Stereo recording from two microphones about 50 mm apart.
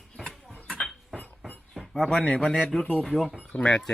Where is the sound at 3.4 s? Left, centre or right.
Left.